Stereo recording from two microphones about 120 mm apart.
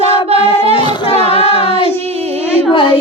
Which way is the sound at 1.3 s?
55° left (ahead or behind).